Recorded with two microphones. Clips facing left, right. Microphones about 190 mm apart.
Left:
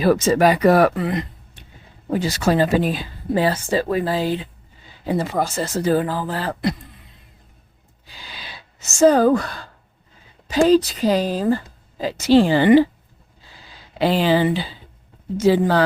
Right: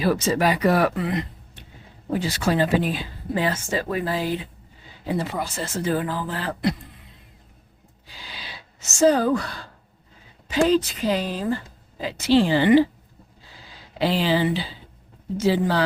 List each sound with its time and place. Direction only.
0.0 s speech: 50° left (ahead or behind); by 4.4 s 30° left (ahead or behind)
5.0 s speech: 45° left (ahead or behind)
9.0 s speech: 50° left (ahead or behind)
10.6 s speech: 35° left (ahead or behind)
14.0 s speech: 50° left (ahead or behind)